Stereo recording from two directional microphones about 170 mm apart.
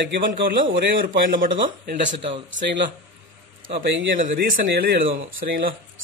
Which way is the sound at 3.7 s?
90° right.